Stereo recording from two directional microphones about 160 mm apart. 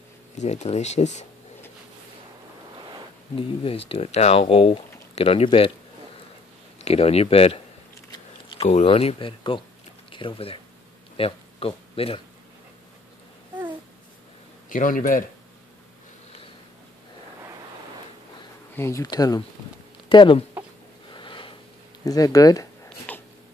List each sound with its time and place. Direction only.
0.4 s speech: 45° left (ahead or behind)
3.3 s speech: 35° left (ahead or behind)
6.8 s speech: 40° left (ahead or behind)
8.1 s a sound: 30° left (ahead or behind)
8.6 s speech: 40° left (ahead or behind)
14.7 s speech: 55° left (ahead or behind)
18.8 s speech: 20° left (ahead or behind)
21.1 s a sound: 30° left (ahead or behind)
22.0 s speech: 20° left (ahead or behind)
23.1 s a sound: 10° left (ahead or behind)